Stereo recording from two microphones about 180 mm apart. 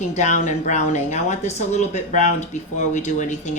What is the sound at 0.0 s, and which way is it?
Speech, 40° left (ahead or behind).